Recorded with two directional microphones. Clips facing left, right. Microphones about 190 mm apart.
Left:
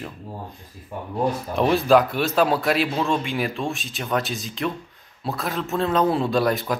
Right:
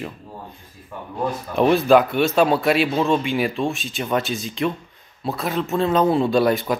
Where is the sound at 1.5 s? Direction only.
Centre (ahead or behind).